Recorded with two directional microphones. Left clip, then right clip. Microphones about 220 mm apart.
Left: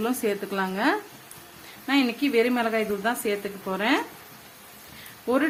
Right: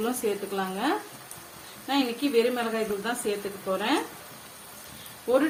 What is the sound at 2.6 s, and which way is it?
Speech, 50° left (ahead or behind).